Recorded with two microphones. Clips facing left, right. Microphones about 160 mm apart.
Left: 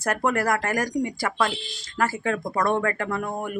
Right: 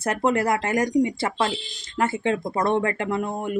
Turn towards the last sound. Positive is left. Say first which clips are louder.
# right 2 dB
turn(degrees=-20)  # may be behind; listen again after turning